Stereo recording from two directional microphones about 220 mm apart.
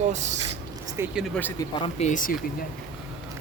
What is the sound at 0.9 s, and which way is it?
Speech, 5° right (ahead or behind).